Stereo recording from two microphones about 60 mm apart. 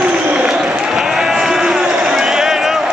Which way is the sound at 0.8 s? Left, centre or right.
Centre.